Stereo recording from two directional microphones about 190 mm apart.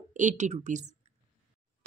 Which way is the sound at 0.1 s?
40° right (ahead or behind).